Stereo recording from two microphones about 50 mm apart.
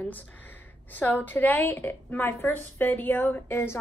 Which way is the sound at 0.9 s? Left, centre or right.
Left.